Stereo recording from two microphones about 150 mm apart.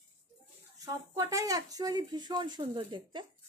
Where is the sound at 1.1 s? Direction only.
25° right (ahead or behind).